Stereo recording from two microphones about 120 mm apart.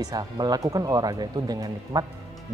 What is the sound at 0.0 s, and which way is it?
Speech, 35° right (ahead or behind).